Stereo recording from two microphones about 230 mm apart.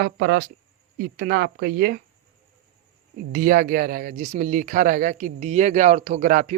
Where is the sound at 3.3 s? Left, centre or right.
Right.